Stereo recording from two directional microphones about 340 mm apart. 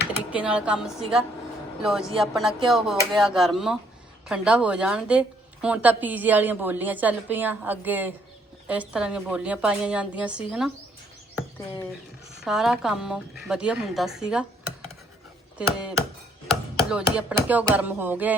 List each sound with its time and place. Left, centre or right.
0.3 s a woman's voice: centre
11.3 s bird: centre
12.5 s a woman's voice: centre
15.5 s a woman's voice: centre